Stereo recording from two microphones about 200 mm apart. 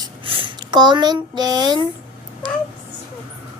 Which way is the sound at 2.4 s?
20° right (ahead or behind).